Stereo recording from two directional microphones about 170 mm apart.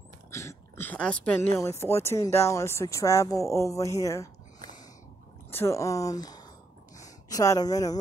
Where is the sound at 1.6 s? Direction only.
15° left (ahead or behind).